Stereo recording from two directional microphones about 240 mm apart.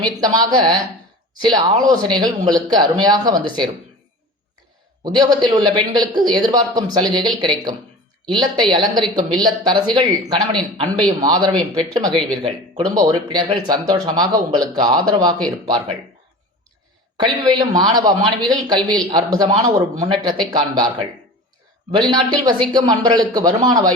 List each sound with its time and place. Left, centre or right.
0.0 s speech: centre
5.0 s speech: centre
17.2 s speech: centre